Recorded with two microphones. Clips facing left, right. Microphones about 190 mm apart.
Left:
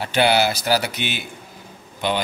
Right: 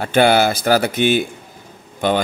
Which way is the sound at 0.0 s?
50° right (ahead or behind).